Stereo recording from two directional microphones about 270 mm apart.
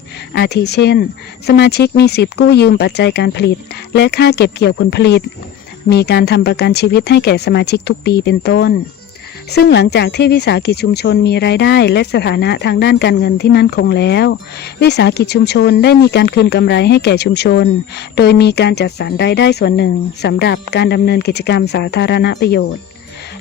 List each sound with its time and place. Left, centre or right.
0.3 s speech: left